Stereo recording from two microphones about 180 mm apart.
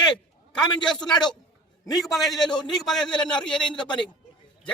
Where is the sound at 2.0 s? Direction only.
Centre (ahead or behind).